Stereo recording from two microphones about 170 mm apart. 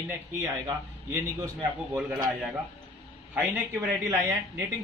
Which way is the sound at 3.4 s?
10° right (ahead or behind).